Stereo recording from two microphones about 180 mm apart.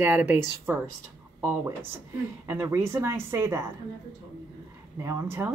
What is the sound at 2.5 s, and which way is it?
Speech, 15° right (ahead or behind).